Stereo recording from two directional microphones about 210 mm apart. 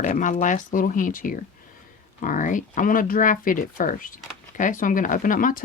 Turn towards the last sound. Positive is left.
turn(degrees=40)  # may be behind; listen again after turning